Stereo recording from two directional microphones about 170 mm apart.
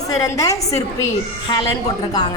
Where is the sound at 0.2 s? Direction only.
20° left (ahead or behind).